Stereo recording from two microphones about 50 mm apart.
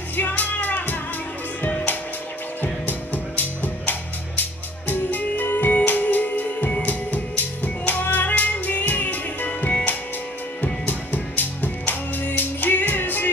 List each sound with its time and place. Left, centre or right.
0.4 s music: left
2.6 s music: left